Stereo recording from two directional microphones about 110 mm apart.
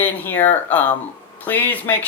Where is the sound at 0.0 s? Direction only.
20° left (ahead or behind).